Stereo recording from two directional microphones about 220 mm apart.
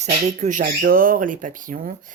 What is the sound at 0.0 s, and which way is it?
A woman's voice, 30° right (ahead or behind).